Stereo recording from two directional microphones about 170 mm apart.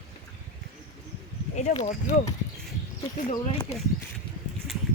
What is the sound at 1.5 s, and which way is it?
Speech, 45° left (ahead or behind).